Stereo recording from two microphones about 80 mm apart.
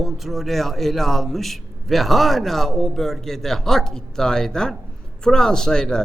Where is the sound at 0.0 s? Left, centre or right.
Centre.